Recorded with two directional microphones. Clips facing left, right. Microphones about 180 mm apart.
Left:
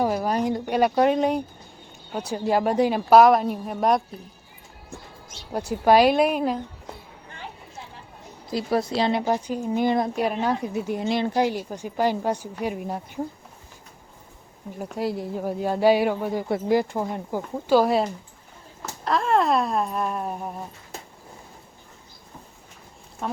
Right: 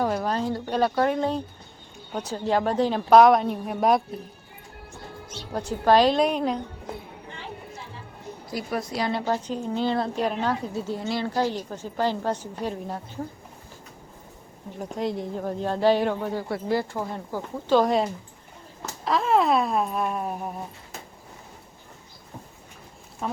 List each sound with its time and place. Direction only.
0.0 s a woman's voice: 10° left (ahead or behind)
5.5 s a woman's voice: 10° left (ahead or behind)
8.5 s a woman's voice: 30° left (ahead or behind); by 13.0 s 10° left (ahead or behind)
14.9 s a woman's voice: 5° left (ahead or behind)
23.2 s speech: centre (ahead or behind)